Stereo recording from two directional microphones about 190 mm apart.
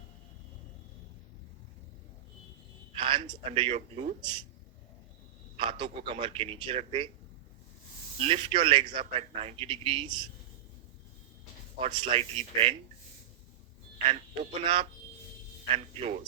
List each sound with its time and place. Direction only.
2.9 s a sound: 25° right (ahead or behind)
3.5 s speech: 25° right (ahead or behind)
5.5 s a man's voice: 25° right (ahead or behind)
8.2 s a man's voice: 30° right (ahead or behind)
11.8 s a man's voice: 25° right (ahead or behind)
14.1 s a man's voice: 30° right (ahead or behind)